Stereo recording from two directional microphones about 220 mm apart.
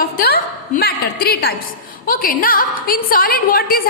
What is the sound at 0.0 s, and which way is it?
A woman's voice, 45° left (ahead or behind).